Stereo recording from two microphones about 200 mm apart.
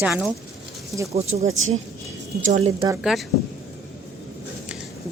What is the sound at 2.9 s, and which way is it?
Speech, centre (ahead or behind).